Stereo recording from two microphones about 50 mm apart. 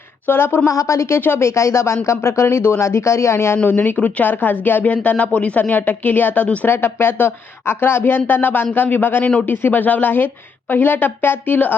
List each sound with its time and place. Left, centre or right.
0.3 s a woman's voice: left
0.7 s speech: left
1.2 s a woman's voice: left
1.5 s speech: left
3.7 s speech: left
6.7 s a woman's voice: left